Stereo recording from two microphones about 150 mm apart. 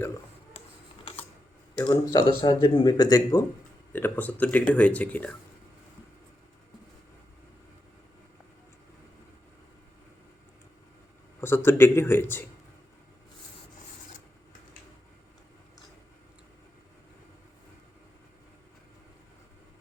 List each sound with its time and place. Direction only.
1.8 s speech: 30° left (ahead or behind)
3.9 s speech: 10° left (ahead or behind)
11.3 s speech: 15° left (ahead or behind)